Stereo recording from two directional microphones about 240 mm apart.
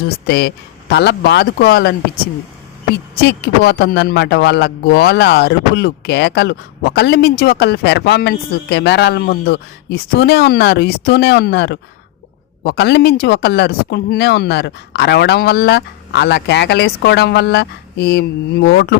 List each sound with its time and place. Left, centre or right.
0.0 s a man's voice: left
3.2 s a man's voice: left